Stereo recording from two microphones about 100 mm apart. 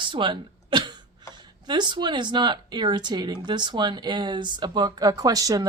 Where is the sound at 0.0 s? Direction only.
55° right (ahead or behind).